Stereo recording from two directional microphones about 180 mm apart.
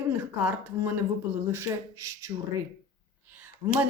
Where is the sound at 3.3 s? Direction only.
10° right (ahead or behind).